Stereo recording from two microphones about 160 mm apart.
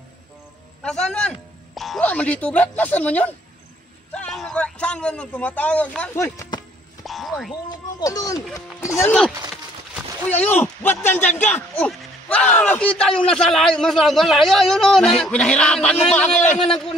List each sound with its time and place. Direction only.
0.8 s a man's voice: 5° left (ahead or behind)
7.1 s a sound: centre (ahead or behind)
8.0 s speech: 20° left (ahead or behind)
9.0 s a man's voice: 5° left (ahead or behind)